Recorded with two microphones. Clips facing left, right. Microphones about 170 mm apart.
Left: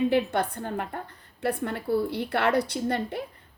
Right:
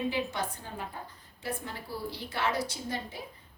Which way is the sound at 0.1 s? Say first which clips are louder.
Left 8 dB; 60° left (ahead or behind).